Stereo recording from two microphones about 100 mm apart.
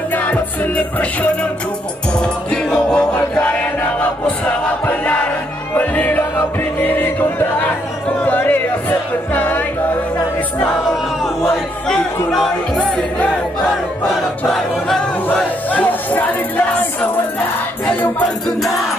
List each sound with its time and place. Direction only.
0.1 s music: 15° left (ahead or behind)
4.5 s a sound: 15° left (ahead or behind)
5.8 s music: 15° left (ahead or behind)
11.5 s music: 5° left (ahead or behind)
14.4 s choir: 5° left (ahead or behind)
15.2 s speech: 15° left (ahead or behind)